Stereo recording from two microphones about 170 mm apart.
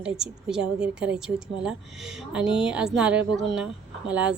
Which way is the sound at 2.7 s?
5° right (ahead or behind).